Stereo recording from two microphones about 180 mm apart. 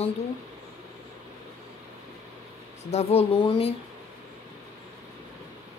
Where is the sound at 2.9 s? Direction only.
35° left (ahead or behind).